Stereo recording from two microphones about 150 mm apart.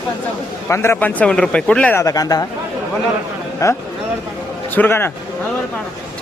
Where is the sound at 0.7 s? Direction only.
20° left (ahead or behind).